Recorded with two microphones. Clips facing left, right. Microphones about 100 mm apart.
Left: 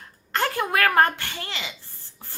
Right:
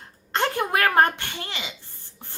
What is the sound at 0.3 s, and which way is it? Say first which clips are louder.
A child's voice: right 1 dB; 25° right (ahead or behind).